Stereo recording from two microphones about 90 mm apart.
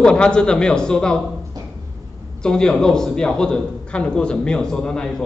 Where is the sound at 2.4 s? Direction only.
10° left (ahead or behind).